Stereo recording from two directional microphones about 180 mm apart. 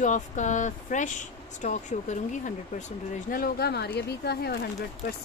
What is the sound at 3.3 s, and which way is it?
Speech, 60° left (ahead or behind).